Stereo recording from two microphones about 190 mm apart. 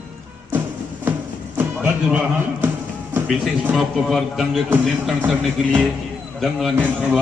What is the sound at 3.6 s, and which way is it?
A man's voice, 5° right (ahead or behind).